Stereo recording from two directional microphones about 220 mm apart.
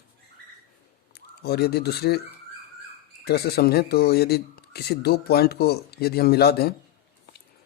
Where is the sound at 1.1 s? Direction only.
45° left (ahead or behind).